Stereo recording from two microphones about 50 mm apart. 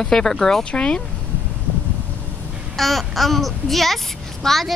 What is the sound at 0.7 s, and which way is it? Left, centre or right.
Speech, left.